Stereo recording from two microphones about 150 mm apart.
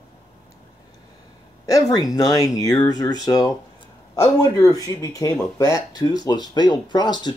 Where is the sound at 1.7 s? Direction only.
20° left (ahead or behind).